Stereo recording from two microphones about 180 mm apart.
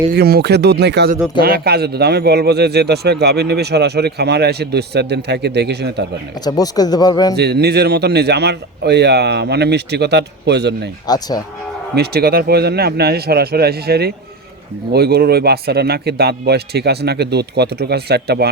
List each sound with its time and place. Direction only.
0.1 s speech: 60° right (ahead or behind)
6.4 s speech: 20° left (ahead or behind)
7.3 s speech: 65° right (ahead or behind)
11.0 s speech: 20° left (ahead or behind)
11.9 s speech: 60° right (ahead or behind)